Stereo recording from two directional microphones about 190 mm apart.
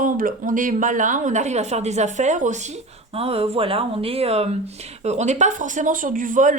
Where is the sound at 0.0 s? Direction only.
45° right (ahead or behind).